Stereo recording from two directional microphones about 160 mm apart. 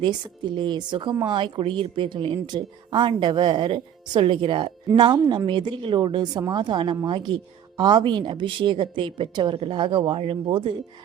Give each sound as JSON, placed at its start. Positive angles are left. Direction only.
{"t": 0.0, "sound": "speech", "side_deg": -30}